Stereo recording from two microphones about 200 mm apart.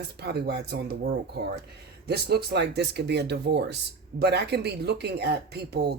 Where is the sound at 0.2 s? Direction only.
55° right (ahead or behind).